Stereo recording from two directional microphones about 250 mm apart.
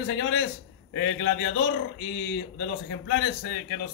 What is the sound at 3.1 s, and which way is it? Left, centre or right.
Speech, left.